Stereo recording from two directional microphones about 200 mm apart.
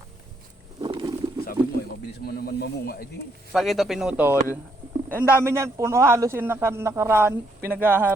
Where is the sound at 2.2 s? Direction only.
50° left (ahead or behind).